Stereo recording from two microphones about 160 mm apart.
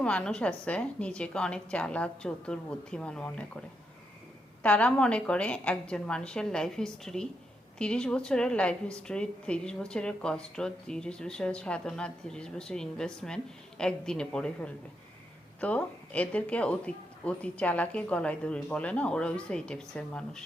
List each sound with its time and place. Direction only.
0.0 s a woman's voice: 5° left (ahead or behind)
4.6 s a woman's voice: 10° left (ahead or behind)